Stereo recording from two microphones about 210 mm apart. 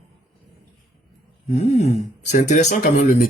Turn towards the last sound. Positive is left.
turn(degrees=35)  # may be behind; listen again after turning